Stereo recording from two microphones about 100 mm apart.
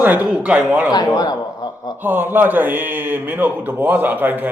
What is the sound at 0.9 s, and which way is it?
Speech, 40° left (ahead or behind).